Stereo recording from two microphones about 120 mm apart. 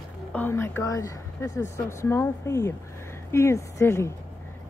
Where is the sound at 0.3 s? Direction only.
15° left (ahead or behind).